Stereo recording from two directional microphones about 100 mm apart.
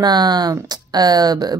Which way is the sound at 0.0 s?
45° right (ahead or behind).